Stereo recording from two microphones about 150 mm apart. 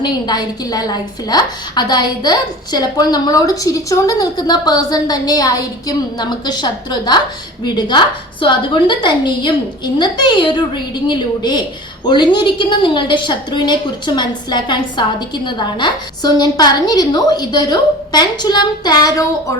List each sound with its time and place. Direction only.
0.0 s a woman's voice: 25° left (ahead or behind)